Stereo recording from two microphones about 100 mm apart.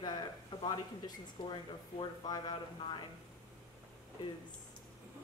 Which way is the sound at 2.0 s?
50° left (ahead or behind).